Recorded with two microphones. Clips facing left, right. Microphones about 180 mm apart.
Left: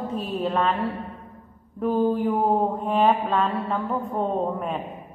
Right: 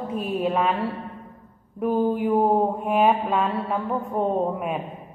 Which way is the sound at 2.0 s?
10° right (ahead or behind).